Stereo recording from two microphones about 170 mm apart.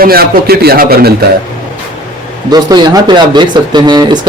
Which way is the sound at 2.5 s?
25° right (ahead or behind).